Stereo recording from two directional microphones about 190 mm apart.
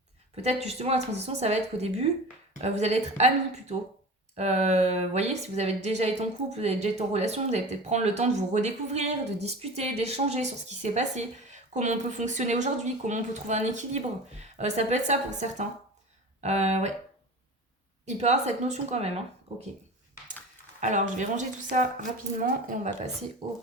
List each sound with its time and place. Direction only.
0.4 s a woman's voice: 35° right (ahead or behind)
18.2 s a woman's voice: 35° right (ahead or behind)
20.8 s a woman's voice: 40° right (ahead or behind)